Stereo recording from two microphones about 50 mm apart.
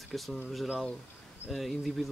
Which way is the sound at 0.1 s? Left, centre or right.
Centre.